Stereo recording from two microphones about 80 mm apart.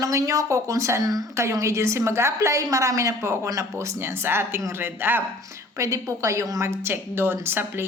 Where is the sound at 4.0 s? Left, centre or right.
Right.